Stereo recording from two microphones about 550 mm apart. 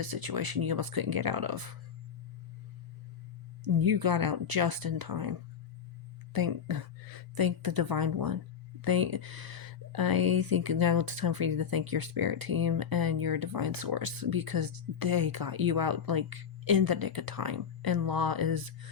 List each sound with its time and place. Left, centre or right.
0.0 s speech: right
3.6 s speech: right
6.3 s a woman's voice: right